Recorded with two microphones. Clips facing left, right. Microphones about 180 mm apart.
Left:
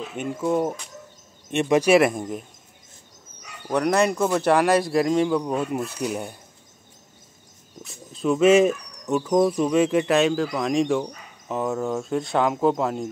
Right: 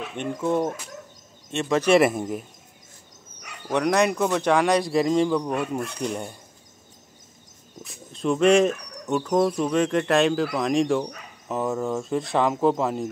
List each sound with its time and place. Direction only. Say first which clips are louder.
0.1 s speech: left 1 dB; 5° left (ahead or behind)
2.0 s speech: even; 5° right (ahead or behind)
3.7 s speech: left 1 dB; centre (ahead or behind)
7.8 s speech: left 1 dB; centre (ahead or behind)